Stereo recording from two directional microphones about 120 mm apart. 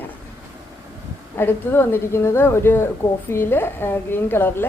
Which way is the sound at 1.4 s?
20° left (ahead or behind).